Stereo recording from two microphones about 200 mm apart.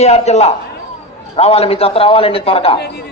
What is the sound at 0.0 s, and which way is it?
A man's voice, 35° left (ahead or behind).